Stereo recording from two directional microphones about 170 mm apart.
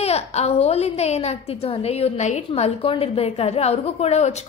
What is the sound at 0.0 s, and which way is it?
A woman's voice, 40° left (ahead or behind).